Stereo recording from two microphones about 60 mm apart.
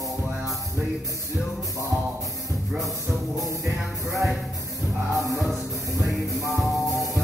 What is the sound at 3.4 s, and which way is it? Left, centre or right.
Music, right.